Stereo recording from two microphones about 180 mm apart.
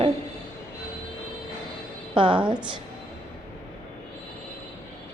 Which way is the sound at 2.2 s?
25° right (ahead or behind).